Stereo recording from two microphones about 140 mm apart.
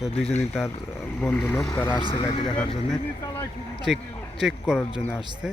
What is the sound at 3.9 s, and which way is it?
Speech, centre (ahead or behind).